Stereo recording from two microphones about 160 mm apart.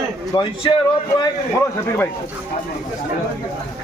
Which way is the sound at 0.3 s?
25° left (ahead or behind).